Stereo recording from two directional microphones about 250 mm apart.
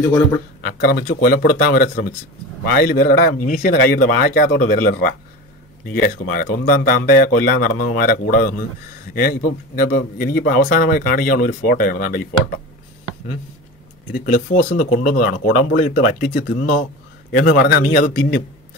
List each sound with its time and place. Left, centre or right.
0.7 s speech: left
14.1 s speech: left